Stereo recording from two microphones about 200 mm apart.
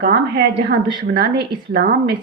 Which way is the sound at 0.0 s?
50° right (ahead or behind).